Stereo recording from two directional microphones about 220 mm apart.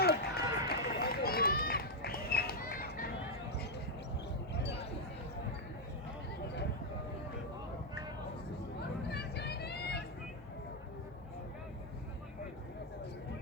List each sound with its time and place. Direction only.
0.0 s run: 45° left (ahead or behind)
8.8 s vehicle: 50° left (ahead or behind)